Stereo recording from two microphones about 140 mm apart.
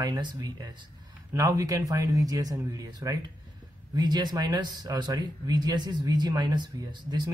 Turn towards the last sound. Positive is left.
turn(degrees=-30)  # may be behind; listen again after turning